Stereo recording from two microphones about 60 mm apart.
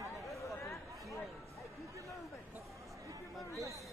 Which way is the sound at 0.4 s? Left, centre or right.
Left.